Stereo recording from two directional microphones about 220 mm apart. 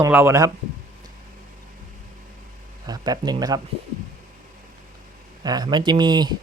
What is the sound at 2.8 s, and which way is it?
Speech, 15° right (ahead or behind).